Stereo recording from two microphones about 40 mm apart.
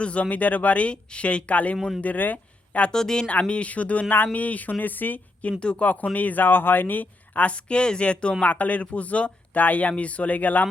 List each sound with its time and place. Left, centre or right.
0.0 s speech: left
2.9 s speech: centre
3.4 s speech: left
5.5 s speech: left
5.8 s speech: left
7.5 s speech: left
8.4 s speech: left
9.9 s speech: left